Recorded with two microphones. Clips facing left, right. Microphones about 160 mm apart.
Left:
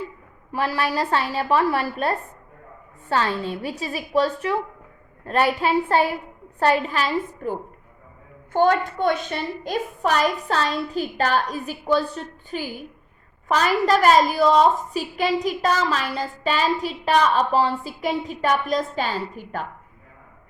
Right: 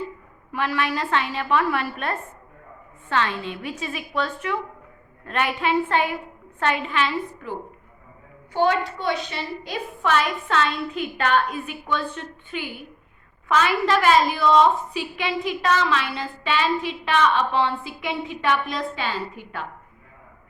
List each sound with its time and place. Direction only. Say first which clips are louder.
0.5 s a woman's voice: left 1 dB; 35° left (ahead or behind)